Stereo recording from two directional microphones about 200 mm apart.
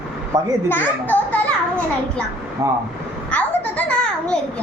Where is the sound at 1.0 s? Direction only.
5° left (ahead or behind).